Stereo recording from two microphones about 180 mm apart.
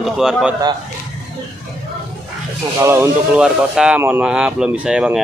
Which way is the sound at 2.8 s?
15° right (ahead or behind).